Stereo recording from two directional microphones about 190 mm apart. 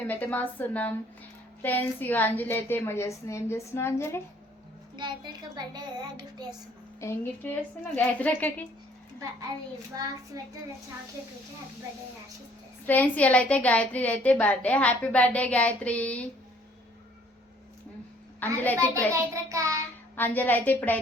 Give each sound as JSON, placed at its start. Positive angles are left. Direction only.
{"t": 0.0, "sound": "a woman's voice", "side_deg": 10}
{"t": 4.9, "sound": "a child's voice", "side_deg": -25}
{"t": 7.0, "sound": "a woman's voice", "side_deg": 15}
{"t": 9.9, "sound": "a child's voice", "side_deg": -20}
{"t": 12.8, "sound": "a woman's voice", "side_deg": 10}
{"t": 18.3, "sound": "a woman's voice", "side_deg": 10}
{"t": 19.1, "sound": "child singing", "side_deg": -15}
{"t": 20.1, "sound": "a woman's voice", "side_deg": 10}